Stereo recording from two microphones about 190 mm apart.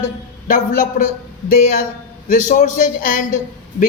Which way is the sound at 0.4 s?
45° left (ahead or behind).